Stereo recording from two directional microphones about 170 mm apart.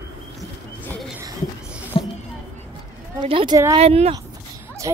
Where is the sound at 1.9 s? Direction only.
35° left (ahead or behind).